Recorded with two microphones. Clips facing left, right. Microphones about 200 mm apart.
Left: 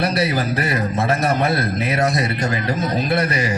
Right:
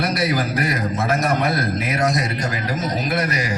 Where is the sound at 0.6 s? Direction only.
30° left (ahead or behind).